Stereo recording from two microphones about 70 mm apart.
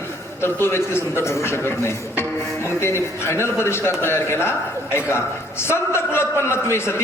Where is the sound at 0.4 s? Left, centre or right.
Left.